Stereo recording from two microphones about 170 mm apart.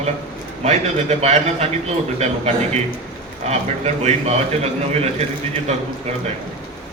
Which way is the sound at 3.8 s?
40° right (ahead or behind).